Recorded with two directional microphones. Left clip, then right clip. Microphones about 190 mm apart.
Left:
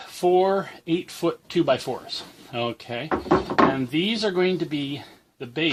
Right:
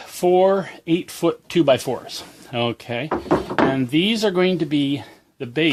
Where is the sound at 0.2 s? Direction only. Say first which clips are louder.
Right 4 dB; 40° right (ahead or behind).